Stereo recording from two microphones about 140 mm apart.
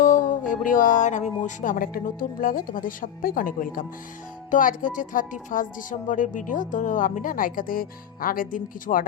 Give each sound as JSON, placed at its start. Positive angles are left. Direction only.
{"t": 0.0, "sound": "a woman's voice", "side_deg": 70}
{"t": 4.5, "sound": "a woman's voice", "side_deg": 70}